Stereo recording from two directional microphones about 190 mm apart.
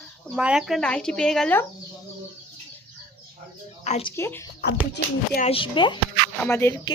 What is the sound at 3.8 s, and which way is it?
Speech, 35° left (ahead or behind).